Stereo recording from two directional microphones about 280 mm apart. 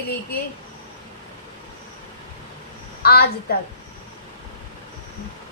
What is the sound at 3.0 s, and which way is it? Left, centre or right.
Speech, left.